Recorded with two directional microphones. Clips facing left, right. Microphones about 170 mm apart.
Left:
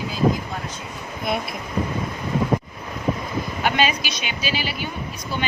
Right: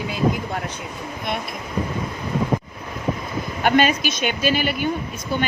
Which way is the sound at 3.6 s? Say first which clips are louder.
Right 5 dB; 50° right (ahead or behind).